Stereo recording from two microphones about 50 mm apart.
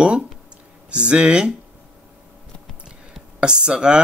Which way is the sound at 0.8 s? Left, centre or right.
Right.